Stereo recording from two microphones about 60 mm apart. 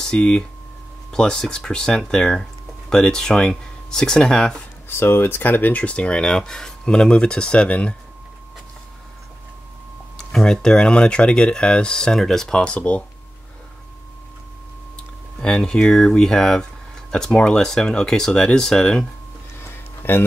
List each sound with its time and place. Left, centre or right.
0.0 s speech: centre
4.8 s speech: left; by 7.9 s centre
10.1 s speech: centre
15.4 s speech: centre
20.0 s speech: left